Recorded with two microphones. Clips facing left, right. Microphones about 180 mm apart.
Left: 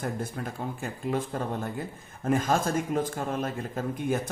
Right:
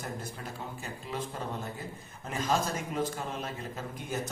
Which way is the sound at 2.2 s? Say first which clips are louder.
Left 5 dB; 50° left (ahead or behind).